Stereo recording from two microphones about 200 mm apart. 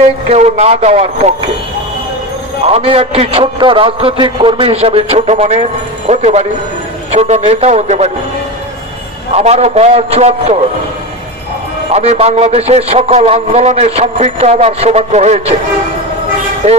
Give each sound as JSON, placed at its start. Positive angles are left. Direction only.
{"t": 0.3, "sound": "a man's voice", "side_deg": -35}
{"t": 2.6, "sound": "a man's voice", "side_deg": -30}
{"t": 9.3, "sound": "a man's voice", "side_deg": -30}
{"t": 11.9, "sound": "a man's voice", "side_deg": -30}